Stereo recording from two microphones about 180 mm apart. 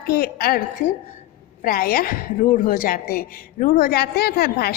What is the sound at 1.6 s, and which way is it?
A woman's voice, 55° left (ahead or behind).